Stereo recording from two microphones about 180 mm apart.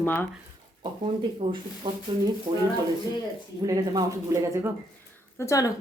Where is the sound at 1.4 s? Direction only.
25° right (ahead or behind).